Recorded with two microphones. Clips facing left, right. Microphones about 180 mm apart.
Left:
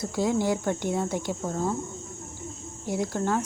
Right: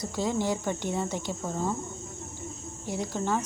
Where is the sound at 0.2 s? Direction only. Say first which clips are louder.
Left 3 dB; 10° left (ahead or behind).